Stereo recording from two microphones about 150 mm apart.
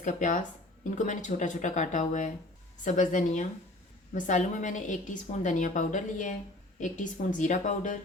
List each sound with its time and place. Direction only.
0.0 s a woman's voice: 55° left (ahead or behind)